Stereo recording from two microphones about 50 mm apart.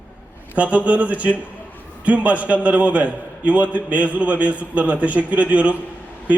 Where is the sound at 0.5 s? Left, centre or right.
Right.